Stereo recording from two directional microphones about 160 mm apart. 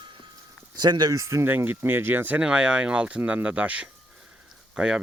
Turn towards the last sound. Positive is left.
turn(degrees=-5)  # may be behind; listen again after turning